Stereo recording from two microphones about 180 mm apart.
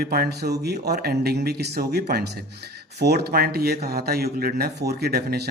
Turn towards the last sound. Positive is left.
turn(degrees=-60)  # may be behind; listen again after turning